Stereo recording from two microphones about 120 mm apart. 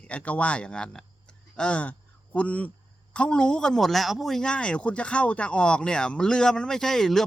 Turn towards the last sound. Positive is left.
turn(degrees=5)  # may be behind; listen again after turning